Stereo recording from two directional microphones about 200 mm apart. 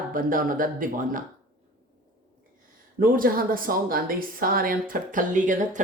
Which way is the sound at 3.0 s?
45° right (ahead or behind).